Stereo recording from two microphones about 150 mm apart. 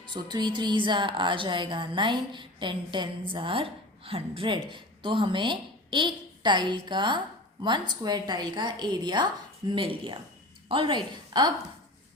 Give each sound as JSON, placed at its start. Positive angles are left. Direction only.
{"t": 0.0, "sound": "a woman's voice", "side_deg": -30}